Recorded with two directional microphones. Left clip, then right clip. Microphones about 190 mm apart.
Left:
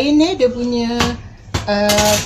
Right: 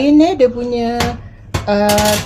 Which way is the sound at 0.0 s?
50° right (ahead or behind).